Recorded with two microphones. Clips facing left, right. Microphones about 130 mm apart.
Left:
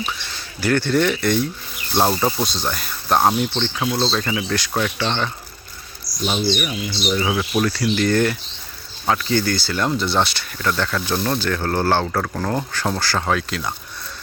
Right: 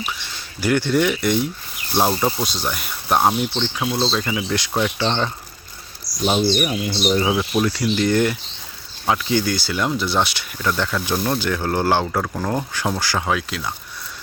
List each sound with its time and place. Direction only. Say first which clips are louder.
0.6 s speech: even; 15° right (ahead or behind)
2.0 s speech: even; centre (ahead or behind)
2.4 s speech: left 1 dB; 10° right (ahead or behind)
4.7 s speech: right 3 dB; 20° right (ahead or behind)
6.2 s speech: right 3 dB; 35° right (ahead or behind)
7.2 s speech: right 1 dB; 15° right (ahead or behind)